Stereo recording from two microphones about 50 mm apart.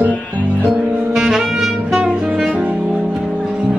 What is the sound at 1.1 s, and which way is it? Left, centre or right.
Saxophone, centre.